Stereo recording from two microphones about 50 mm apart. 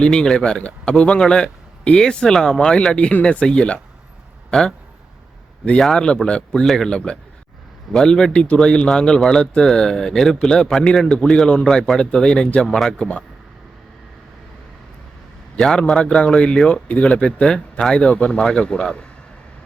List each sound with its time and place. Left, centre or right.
0.0 s a man's voice: centre
5.8 s a man's voice: centre
12.6 s speech: centre
13.0 s a man's voice: left
15.5 s a man's voice: centre